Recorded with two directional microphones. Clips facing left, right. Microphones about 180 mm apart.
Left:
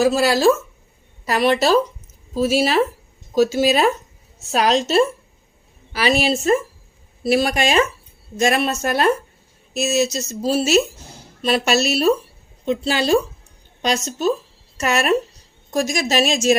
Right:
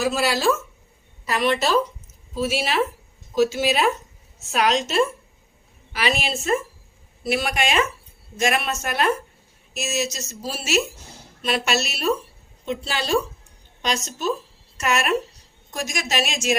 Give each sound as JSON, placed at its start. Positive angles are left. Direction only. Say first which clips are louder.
{"t": 0.0, "sound": "speech", "louder": "left 6 dB", "side_deg": 40}